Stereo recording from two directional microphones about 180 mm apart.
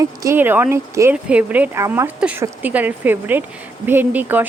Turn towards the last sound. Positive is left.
turn(degrees=-10)  # may be behind; listen again after turning